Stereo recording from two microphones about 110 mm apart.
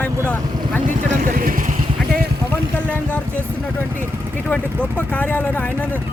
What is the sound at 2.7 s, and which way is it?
Speech, 15° left (ahead or behind).